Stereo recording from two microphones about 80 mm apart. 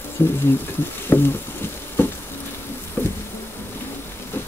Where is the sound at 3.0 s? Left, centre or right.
Left.